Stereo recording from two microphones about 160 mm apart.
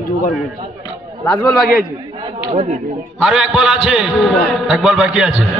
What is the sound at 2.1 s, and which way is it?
Chatter, 25° right (ahead or behind).